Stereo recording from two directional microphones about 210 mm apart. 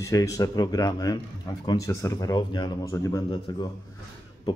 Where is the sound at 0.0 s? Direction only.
15° left (ahead or behind).